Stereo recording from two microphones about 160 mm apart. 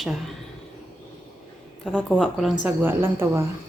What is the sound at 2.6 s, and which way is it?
Speech, 15° right (ahead or behind).